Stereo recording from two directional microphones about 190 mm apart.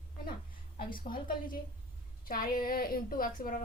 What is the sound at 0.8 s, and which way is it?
A woman's voice, 50° left (ahead or behind).